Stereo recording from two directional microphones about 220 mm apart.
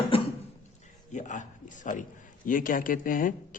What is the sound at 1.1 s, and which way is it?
A man's voice, 35° left (ahead or behind).